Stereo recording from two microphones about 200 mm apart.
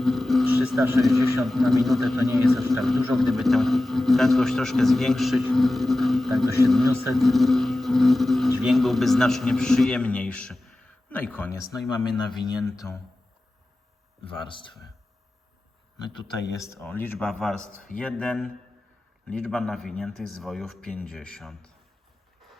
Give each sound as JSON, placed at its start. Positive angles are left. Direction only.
{"t": 0.0, "sound": "a sound", "side_deg": 0}
{"t": 0.9, "sound": "speech", "side_deg": 0}
{"t": 16.2, "sound": "speech", "side_deg": 15}